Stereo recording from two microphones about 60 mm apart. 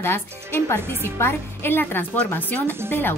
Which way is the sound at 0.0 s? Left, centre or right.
Left.